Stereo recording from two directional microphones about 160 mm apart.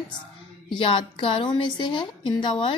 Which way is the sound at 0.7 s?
35° left (ahead or behind).